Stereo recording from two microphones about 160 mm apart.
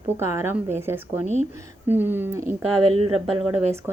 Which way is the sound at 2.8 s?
35° right (ahead or behind).